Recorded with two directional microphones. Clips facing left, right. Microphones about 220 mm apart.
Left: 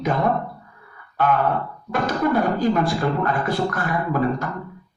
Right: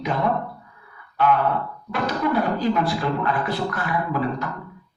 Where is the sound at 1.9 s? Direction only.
45° left (ahead or behind).